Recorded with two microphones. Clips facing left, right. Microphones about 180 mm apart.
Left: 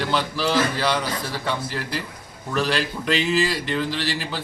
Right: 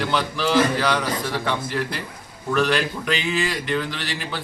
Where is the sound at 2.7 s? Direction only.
35° left (ahead or behind).